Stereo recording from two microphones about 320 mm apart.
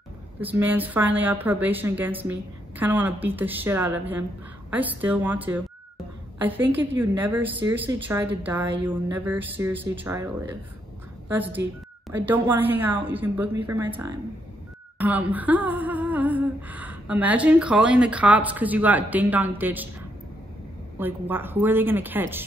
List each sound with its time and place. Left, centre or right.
0.4 s humming: centre
6.4 s a woman's voice: centre
11.2 s humming: centre
12.1 s a woman's voice: centre
15.0 s humming: centre
21.0 s a woman's voice: centre